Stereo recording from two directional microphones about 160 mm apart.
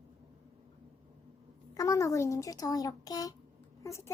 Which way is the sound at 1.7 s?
20° left (ahead or behind).